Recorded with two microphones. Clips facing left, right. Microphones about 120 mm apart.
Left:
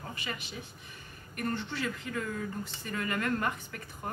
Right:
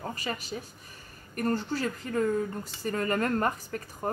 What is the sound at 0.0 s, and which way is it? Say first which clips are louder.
Speech: right 5 dB; 40° right (ahead or behind).